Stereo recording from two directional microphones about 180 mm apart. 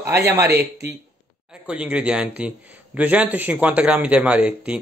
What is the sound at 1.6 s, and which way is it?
A man's voice, 5° right (ahead or behind).